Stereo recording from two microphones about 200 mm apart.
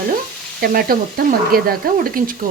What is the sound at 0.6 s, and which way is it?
Speech, 50° right (ahead or behind).